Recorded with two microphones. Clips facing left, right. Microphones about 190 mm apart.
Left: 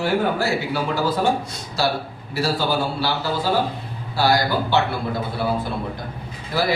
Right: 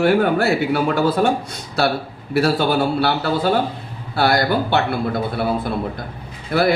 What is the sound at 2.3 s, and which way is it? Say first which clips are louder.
A man's voice: right 5 dB; 60° right (ahead or behind).